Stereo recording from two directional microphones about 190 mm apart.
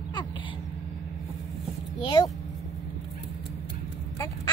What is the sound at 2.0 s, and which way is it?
Speech, 25° left (ahead or behind).